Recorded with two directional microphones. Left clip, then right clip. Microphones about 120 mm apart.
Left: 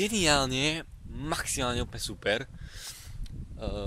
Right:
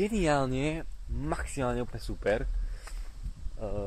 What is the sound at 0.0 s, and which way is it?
Speech, 35° left (ahead or behind).